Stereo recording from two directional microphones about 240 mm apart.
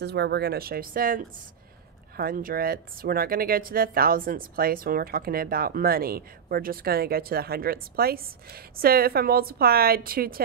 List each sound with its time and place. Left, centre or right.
0.0 s speech: right